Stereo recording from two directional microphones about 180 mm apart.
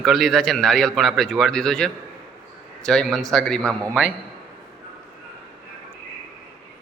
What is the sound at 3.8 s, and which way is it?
Speech, 10° right (ahead or behind).